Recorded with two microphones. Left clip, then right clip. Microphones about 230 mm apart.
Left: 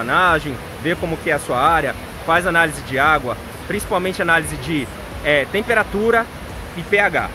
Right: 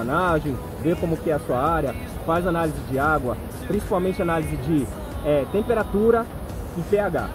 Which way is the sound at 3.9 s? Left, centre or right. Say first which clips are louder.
Left 6 dB; left.